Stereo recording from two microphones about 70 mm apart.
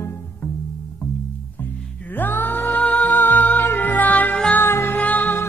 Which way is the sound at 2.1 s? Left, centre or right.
Left.